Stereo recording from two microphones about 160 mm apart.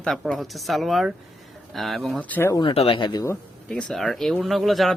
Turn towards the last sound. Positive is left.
turn(degrees=0)  # may be behind; listen again after turning